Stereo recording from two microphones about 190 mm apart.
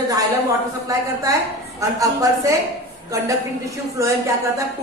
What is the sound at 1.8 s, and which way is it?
A woman's voice, 15° right (ahead or behind).